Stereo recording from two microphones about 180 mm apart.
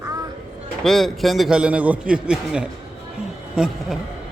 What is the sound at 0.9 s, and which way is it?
A man's voice, centre (ahead or behind).